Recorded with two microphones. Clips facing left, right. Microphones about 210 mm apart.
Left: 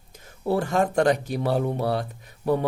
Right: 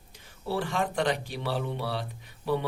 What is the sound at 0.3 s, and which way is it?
Speech, 45° left (ahead or behind).